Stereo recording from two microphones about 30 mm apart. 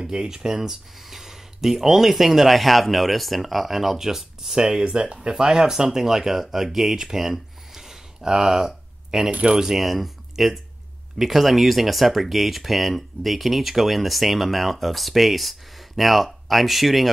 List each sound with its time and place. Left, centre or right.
0.0 s speech: centre
4.6 s speech: right
9.8 s speech: centre